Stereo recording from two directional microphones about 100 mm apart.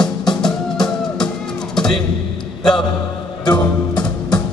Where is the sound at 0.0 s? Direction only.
45° left (ahead or behind).